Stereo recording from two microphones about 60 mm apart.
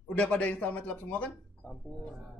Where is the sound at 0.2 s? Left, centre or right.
Left.